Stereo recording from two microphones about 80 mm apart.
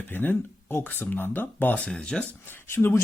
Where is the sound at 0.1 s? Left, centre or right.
Left.